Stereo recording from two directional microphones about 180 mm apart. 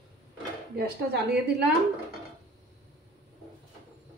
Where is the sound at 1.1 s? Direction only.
70° right (ahead or behind).